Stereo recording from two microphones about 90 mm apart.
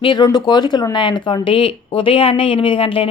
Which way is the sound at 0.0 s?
55° left (ahead or behind).